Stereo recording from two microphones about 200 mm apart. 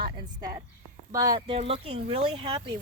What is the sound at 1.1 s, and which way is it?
Speech, 15° right (ahead or behind).